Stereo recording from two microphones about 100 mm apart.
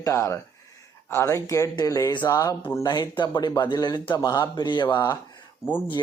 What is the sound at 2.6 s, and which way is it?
Speech, 20° left (ahead or behind).